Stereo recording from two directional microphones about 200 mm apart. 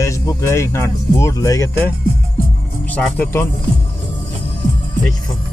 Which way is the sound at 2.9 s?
5° left (ahead or behind).